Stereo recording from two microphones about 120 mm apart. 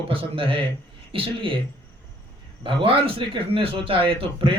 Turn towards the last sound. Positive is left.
turn(degrees=-45)  # may be behind; listen again after turning